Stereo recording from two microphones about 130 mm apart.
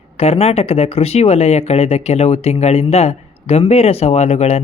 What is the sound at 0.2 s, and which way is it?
Speech, 50° left (ahead or behind).